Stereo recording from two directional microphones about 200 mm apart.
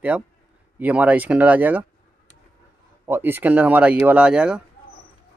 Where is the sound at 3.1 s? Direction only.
10° right (ahead or behind).